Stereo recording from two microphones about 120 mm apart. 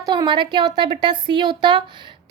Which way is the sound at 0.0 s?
35° right (ahead or behind).